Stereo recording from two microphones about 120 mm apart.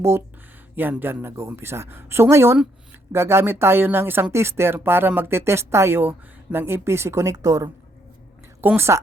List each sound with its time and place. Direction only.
0.8 s speech: 15° right (ahead or behind)